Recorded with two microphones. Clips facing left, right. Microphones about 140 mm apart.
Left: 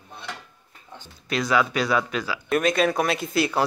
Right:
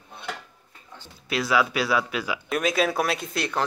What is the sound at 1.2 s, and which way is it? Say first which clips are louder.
Speech: left 1 dB; 5° right (ahead or behind).